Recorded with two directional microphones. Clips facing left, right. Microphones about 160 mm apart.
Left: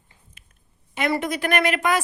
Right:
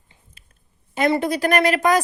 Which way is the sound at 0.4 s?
35° right (ahead or behind).